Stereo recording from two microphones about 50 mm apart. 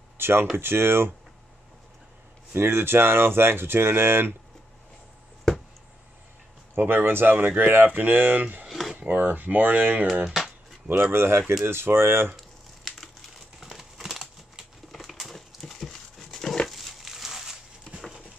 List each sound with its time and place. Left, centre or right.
0.2 s speech: right
2.5 s speech: right
6.7 s speech: right
7.3 s speech: right
8.6 s a sound: centre
8.9 s speech: right
10.2 s speech: centre
10.9 s speech: right
12.4 s crumpling: centre
13.6 s typing: centre
16.6 s a sound: centre
17.9 s a sound: left